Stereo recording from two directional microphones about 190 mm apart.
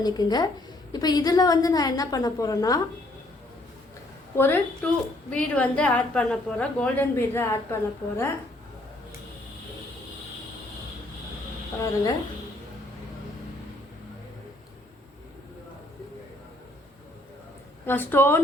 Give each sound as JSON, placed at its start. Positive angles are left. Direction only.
{"t": 0.0, "sound": "a woman's voice", "side_deg": 20}
{"t": 4.4, "sound": "a woman's voice", "side_deg": 10}
{"t": 17.8, "sound": "a woman's voice", "side_deg": 10}